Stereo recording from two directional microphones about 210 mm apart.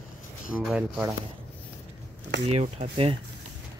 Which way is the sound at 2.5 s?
30° right (ahead or behind).